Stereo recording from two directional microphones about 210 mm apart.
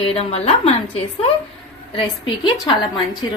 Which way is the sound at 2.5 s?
25° left (ahead or behind).